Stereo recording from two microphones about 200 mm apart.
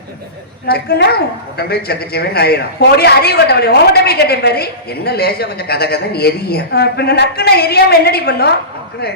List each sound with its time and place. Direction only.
0.7 s a woman's voice: 55° left (ahead or behind)